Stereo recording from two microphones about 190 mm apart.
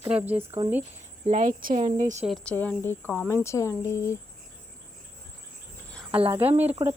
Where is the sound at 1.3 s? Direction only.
40° right (ahead or behind).